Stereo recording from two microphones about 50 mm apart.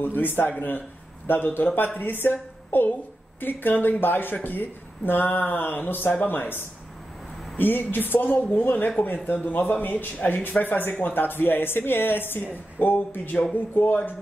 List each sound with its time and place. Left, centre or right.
0.0 s a woman's voice: left